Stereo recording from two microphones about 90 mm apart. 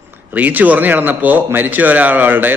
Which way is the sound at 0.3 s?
20° right (ahead or behind).